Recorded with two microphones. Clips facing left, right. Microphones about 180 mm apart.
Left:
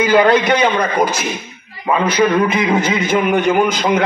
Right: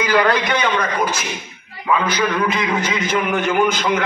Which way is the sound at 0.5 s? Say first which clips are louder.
Left 5 dB; 35° left (ahead or behind).